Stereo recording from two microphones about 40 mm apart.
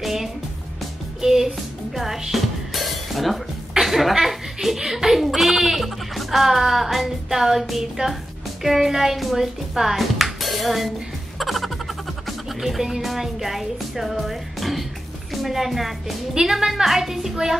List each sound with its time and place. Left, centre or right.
0.0 s music: centre
1.2 s a woman's voice: centre
2.0 s music: centre
3.8 s speech: centre
11.3 s music: centre
15.4 s a woman's voice: centre